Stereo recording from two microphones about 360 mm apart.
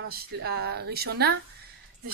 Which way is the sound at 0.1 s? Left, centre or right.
Right.